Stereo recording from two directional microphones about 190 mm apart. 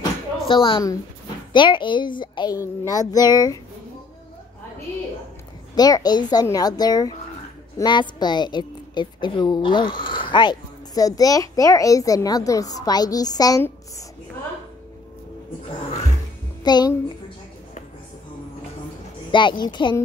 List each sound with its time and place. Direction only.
0.5 s a woman's voice: 25° left (ahead or behind)
5.8 s a woman's voice: 20° left (ahead or behind)
16.6 s a child's voice: 20° left (ahead or behind)
19.3 s a woman's voice: 25° left (ahead or behind)